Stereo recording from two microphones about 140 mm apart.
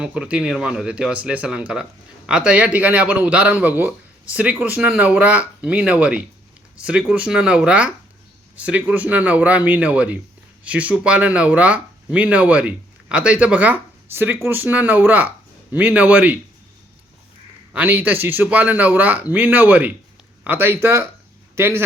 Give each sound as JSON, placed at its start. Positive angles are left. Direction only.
{"t": 0.0, "sound": "speech", "side_deg": -10}
{"t": 17.7, "sound": "speech", "side_deg": -15}